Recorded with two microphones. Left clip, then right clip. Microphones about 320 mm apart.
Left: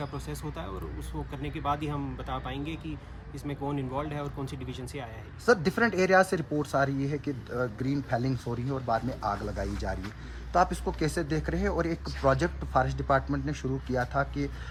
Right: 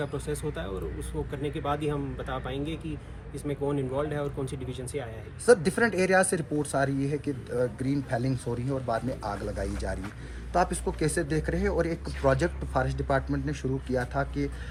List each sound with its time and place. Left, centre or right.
0.0 s speech: centre
7.5 s speech: centre
8.2 s speech: left
10.5 s speech: left